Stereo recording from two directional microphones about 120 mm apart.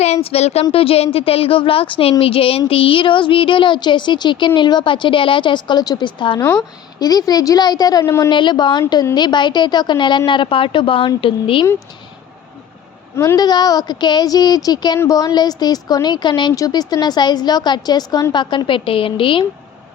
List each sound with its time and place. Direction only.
0.0 s a woman's voice: 60° left (ahead or behind); by 8.3 s 25° left (ahead or behind)
8.3 s a woman's voice: 40° left (ahead or behind)
13.1 s a woman's voice: 30° left (ahead or behind); by 19.5 s 45° left (ahead or behind)